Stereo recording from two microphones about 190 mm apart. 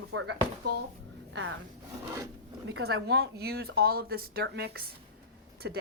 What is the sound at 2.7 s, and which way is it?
Speech, 65° right (ahead or behind).